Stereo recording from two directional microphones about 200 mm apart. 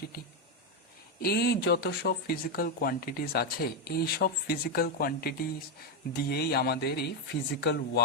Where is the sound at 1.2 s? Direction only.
50° left (ahead or behind).